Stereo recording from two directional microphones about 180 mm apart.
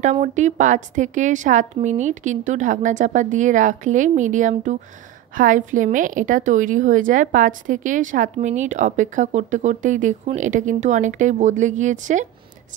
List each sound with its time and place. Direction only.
0.0 s a woman's voice: 40° right (ahead or behind)